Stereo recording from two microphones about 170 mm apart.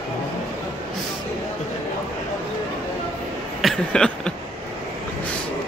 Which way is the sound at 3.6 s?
5° left (ahead or behind).